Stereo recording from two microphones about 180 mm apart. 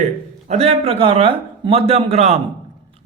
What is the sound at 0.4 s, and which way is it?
A man's voice, 35° right (ahead or behind).